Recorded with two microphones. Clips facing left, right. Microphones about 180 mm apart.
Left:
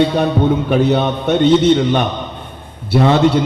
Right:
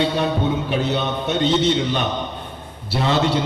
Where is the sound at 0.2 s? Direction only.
55° left (ahead or behind).